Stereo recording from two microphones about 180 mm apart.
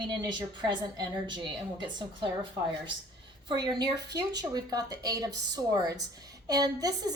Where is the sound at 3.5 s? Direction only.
25° right (ahead or behind).